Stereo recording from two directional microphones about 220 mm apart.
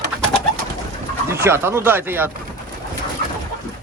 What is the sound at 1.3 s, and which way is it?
Speech, 10° right (ahead or behind).